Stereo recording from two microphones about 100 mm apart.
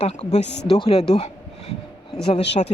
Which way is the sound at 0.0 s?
90° left.